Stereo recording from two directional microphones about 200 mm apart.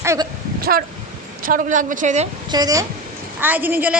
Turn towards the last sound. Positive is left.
turn(degrees=-10)  # may be behind; listen again after turning